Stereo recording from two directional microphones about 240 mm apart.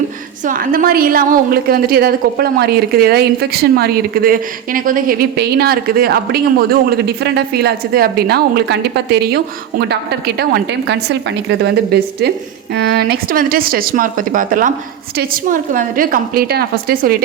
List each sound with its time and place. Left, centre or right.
0.4 s a woman's voice: right